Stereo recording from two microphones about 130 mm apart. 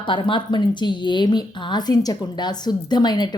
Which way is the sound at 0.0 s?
40° left (ahead or behind).